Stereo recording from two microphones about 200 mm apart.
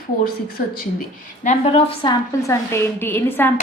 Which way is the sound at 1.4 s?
30° left (ahead or behind).